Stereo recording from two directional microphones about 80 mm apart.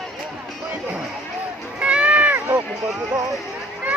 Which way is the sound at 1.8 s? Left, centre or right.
Centre.